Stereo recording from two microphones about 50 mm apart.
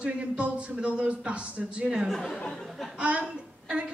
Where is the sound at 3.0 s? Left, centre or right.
Right.